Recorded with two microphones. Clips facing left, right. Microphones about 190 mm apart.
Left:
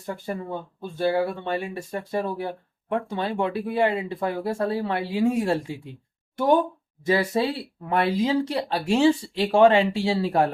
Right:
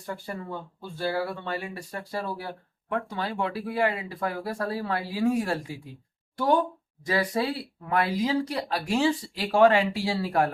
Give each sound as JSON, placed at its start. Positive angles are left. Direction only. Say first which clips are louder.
{"t": 0.0, "sound": "speech", "louder": "left 4 dB", "side_deg": 20}